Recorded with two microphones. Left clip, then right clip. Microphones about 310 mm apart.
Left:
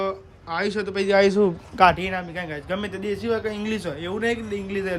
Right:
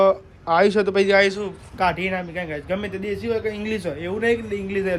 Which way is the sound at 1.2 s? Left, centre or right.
Centre.